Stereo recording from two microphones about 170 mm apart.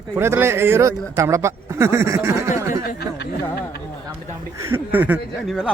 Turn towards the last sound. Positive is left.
turn(degrees=0)  # may be behind; listen again after turning